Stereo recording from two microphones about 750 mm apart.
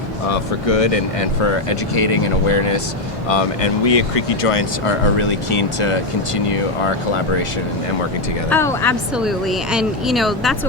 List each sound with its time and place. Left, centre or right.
0.3 s speech: left
8.4 s speech: centre